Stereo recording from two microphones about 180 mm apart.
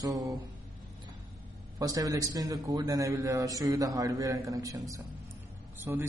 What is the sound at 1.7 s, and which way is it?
A man's voice, 20° right (ahead or behind).